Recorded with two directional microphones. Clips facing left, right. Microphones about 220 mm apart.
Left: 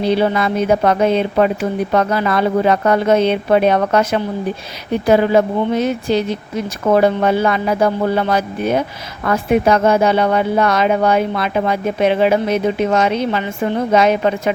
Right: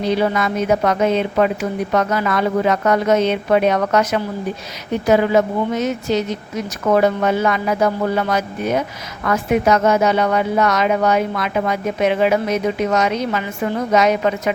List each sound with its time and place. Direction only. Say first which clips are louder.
0.0 s a woman's voice: left 2 dB; 30° left (ahead or behind)